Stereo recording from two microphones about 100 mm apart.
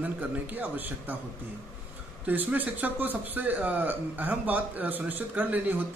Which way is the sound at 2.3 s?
15° right (ahead or behind).